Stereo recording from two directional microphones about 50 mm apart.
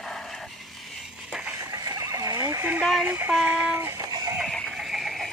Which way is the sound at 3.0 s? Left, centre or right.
Right.